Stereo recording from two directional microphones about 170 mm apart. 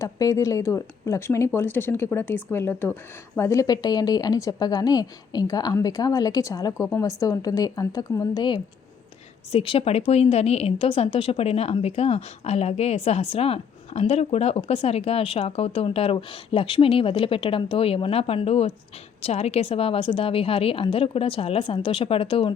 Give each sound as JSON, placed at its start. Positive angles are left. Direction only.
{"t": 0.0, "sound": "a woman's voice", "side_deg": 20}